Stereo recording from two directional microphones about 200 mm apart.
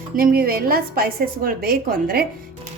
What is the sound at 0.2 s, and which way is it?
A woman's voice, 45° right (ahead or behind).